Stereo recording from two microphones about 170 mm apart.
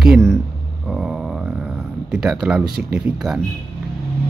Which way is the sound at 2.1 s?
Centre (ahead or behind).